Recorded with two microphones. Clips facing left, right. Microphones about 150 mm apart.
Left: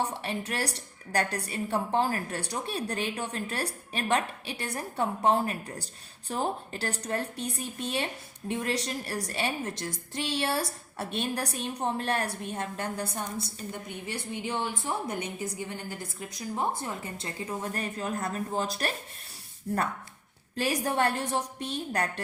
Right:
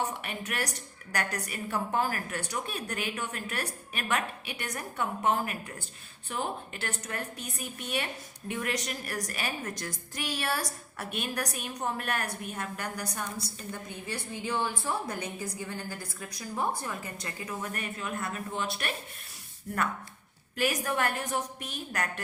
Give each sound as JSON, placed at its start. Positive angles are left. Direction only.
{"t": 0.0, "sound": "a woman's voice", "side_deg": 30}